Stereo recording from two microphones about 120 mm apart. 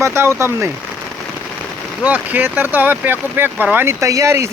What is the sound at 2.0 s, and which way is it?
Speech, 15° right (ahead or behind).